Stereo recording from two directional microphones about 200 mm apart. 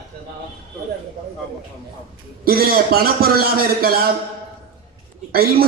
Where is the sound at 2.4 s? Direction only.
50° right (ahead or behind).